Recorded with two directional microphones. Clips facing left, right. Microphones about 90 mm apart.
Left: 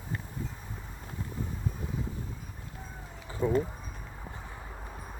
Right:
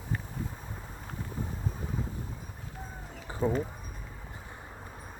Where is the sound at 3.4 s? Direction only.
20° right (ahead or behind).